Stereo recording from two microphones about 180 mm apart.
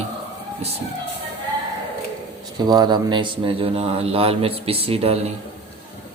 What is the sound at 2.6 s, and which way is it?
Speech, 25° right (ahead or behind).